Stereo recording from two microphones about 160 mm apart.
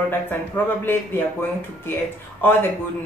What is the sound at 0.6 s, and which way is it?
Speech, 15° left (ahead or behind).